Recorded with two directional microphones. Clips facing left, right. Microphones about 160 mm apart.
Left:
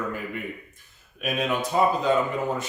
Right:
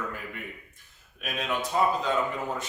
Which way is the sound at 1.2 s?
10° left (ahead or behind).